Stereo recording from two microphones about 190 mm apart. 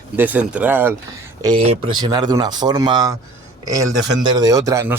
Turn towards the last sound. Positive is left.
turn(degrees=-15)  # may be behind; listen again after turning